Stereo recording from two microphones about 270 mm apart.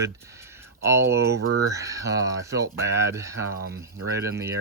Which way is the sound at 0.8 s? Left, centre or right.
Centre.